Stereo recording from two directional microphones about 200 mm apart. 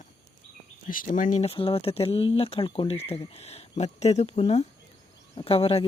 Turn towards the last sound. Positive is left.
turn(degrees=30)  # may be behind; listen again after turning